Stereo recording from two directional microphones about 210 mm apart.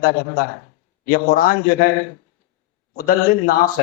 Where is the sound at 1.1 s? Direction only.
45° left (ahead or behind).